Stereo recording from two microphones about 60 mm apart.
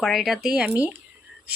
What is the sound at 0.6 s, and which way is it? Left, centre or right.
Stir, right.